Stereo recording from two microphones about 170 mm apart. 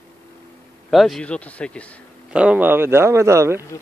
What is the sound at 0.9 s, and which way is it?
Speech, centre (ahead or behind).